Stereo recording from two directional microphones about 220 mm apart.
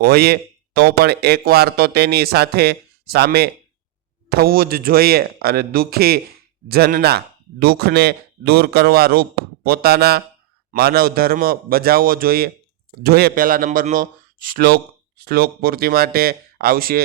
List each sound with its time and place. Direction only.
0.0 s speech: 45° right (ahead or behind)